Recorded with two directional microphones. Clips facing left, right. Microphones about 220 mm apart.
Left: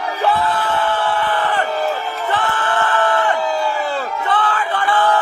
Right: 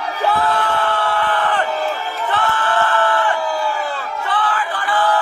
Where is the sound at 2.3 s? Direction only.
15° left (ahead or behind).